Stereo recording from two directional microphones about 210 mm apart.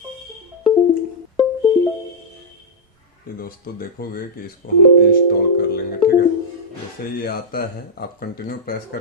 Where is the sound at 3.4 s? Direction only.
45° left (ahead or behind).